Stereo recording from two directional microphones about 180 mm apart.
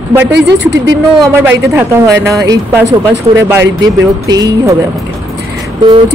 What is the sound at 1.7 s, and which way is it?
Speech, 15° right (ahead or behind).